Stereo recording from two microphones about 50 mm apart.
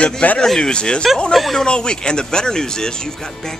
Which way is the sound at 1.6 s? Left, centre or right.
Centre.